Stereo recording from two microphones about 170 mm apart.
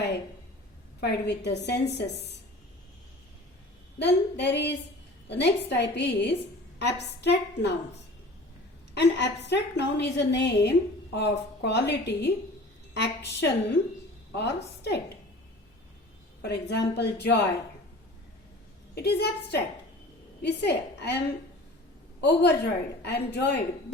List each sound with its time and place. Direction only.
1.0 s a woman's voice: 80° left
3.9 s a woman's voice: 85° left
9.0 s a woman's voice: 90° left
12.9 s a woman's voice: 90° left
14.8 s a woman's voice: 80° left
16.4 s a woman's voice: 80° left
18.9 s a woman's voice: 75° left (ahead or behind)
22.2 s a woman's voice: 80° left